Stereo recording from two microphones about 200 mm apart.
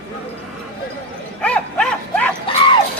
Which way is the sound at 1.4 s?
5° left (ahead or behind).